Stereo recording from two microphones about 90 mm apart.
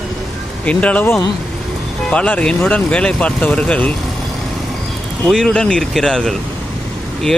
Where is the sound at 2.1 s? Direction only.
15° left (ahead or behind).